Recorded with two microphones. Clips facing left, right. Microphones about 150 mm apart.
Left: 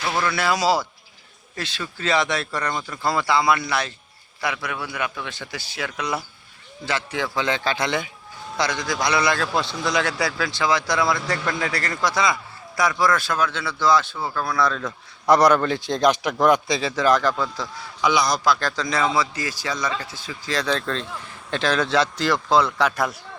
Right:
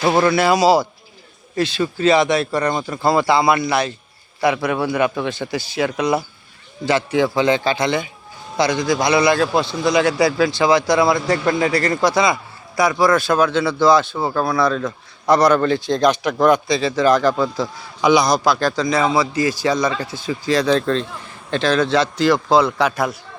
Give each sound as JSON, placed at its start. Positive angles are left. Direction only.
{"t": 0.0, "sound": "speech", "side_deg": -40}
{"t": 0.3, "sound": "a man's voice", "side_deg": -15}
{"t": 2.6, "sound": "speech", "side_deg": -30}
{"t": 3.1, "sound": "a man's voice", "side_deg": -20}
{"t": 4.4, "sound": "speech", "side_deg": -30}
{"t": 5.5, "sound": "a man's voice", "side_deg": -15}
{"t": 8.5, "sound": "a man's voice", "side_deg": -10}
{"t": 11.8, "sound": "speech", "side_deg": -30}
{"t": 12.0, "sound": "speech", "side_deg": -15}
{"t": 14.2, "sound": "a man's voice", "side_deg": -30}
{"t": 15.3, "sound": "a man's voice", "side_deg": 15}
{"t": 17.3, "sound": "a man's voice", "side_deg": -15}
{"t": 21.5, "sound": "a man's voice", "side_deg": 10}